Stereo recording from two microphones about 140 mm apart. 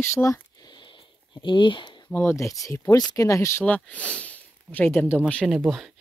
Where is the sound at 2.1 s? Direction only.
15° left (ahead or behind).